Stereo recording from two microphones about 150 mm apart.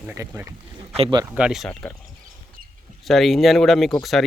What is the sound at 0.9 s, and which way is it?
Speech, 40° right (ahead or behind).